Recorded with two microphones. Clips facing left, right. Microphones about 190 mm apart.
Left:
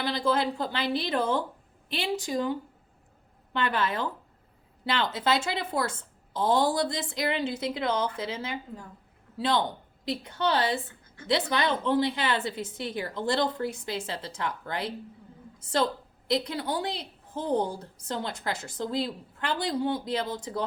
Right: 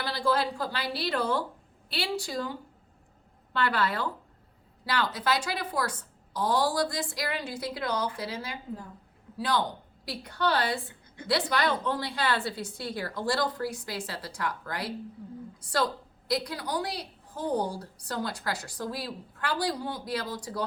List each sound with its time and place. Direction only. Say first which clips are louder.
0.0 s a woman's voice: left 1 dB; 20° left (ahead or behind)